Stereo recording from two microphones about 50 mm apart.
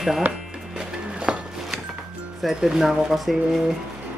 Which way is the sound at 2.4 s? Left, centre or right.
Centre.